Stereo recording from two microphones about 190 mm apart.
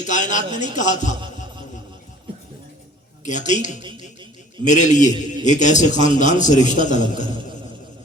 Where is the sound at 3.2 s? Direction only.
40° left (ahead or behind).